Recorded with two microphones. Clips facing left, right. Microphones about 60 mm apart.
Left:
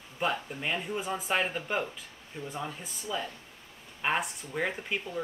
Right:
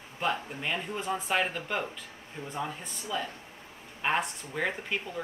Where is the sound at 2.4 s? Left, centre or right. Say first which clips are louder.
Left 1 dB; right.